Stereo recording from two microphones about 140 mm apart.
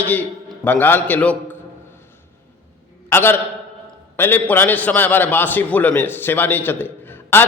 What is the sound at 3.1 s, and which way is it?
A man's voice, 15° left (ahead or behind).